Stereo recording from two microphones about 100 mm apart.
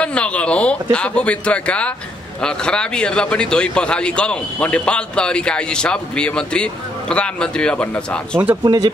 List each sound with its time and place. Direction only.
0.0 s a man's voice: 10° left (ahead or behind)
8.6 s speech: 40° right (ahead or behind)